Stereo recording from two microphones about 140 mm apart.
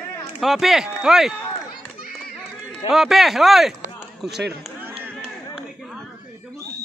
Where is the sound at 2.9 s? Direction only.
Centre (ahead or behind).